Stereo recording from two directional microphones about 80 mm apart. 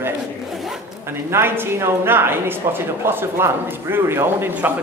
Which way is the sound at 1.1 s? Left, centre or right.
Right.